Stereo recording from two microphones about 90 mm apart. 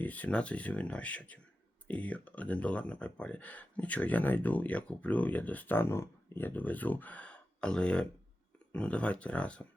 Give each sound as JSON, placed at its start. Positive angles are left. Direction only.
{"t": 0.0, "sound": "speech", "side_deg": 20}